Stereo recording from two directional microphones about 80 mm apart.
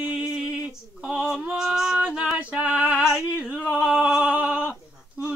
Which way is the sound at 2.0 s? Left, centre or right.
Centre.